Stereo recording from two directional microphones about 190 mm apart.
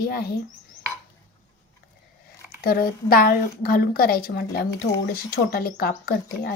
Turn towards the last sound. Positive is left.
turn(degrees=55)  # may be behind; listen again after turning